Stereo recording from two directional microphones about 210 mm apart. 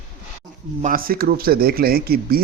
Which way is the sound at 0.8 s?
40° right (ahead or behind).